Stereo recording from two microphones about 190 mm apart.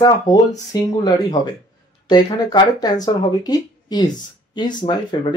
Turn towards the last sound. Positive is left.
turn(degrees=25)  # may be behind; listen again after turning